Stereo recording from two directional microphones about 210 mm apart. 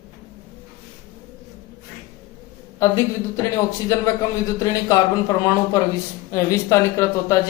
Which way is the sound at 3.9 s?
15° left (ahead or behind).